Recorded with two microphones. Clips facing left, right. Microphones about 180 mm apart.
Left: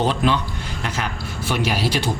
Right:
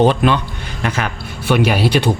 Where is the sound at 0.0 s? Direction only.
60° right (ahead or behind).